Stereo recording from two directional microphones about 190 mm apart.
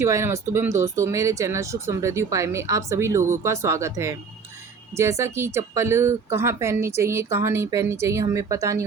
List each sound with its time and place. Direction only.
0.0 s speech: 15° right (ahead or behind)